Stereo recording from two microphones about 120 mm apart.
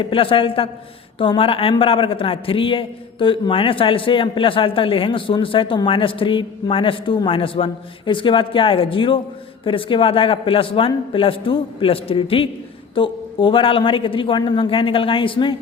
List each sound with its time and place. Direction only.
0.0 s a man's voice: 50° left (ahead or behind)